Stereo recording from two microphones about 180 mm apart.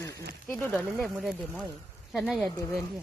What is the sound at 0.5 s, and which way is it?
Speech, 10° left (ahead or behind).